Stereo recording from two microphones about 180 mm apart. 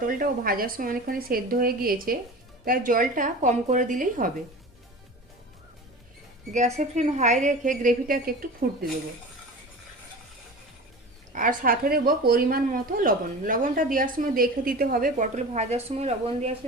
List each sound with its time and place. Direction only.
0.0 s a woman's voice: 50° right (ahead or behind)
6.5 s a woman's voice: 40° right (ahead or behind); by 8.4 s 55° right (ahead or behind)
11.3 s a woman's voice: 50° right (ahead or behind)